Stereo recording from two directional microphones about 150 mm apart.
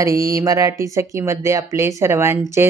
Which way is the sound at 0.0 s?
20° right (ahead or behind).